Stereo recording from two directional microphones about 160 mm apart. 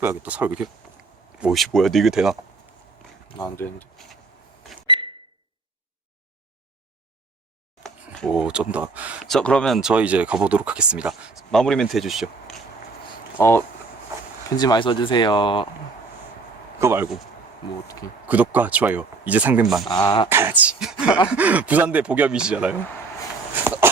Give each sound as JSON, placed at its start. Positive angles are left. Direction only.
{"t": 0.0, "sound": "speech", "side_deg": -10}
{"t": 3.5, "sound": "speech", "side_deg": 15}
{"t": 4.9, "sound": "a sound", "side_deg": -30}
{"t": 7.9, "sound": "speech", "side_deg": 0}
{"t": 9.2, "sound": "speech", "side_deg": 5}
{"t": 13.4, "sound": "speech", "side_deg": 15}
{"t": 16.8, "sound": "speech", "side_deg": -15}
{"t": 17.8, "sound": "speech", "side_deg": 20}
{"t": 18.3, "sound": "speech", "side_deg": -10}
{"t": 19.9, "sound": "speech", "side_deg": 25}
{"t": 20.3, "sound": "speech", "side_deg": -15}
{"t": 23.6, "sound": "a sound", "side_deg": -15}